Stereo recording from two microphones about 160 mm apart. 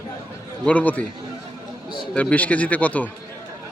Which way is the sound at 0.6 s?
10° left (ahead or behind).